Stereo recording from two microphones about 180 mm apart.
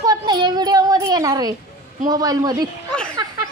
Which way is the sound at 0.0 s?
20° right (ahead or behind).